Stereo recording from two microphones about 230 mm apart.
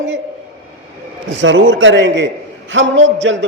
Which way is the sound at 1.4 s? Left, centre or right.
Right.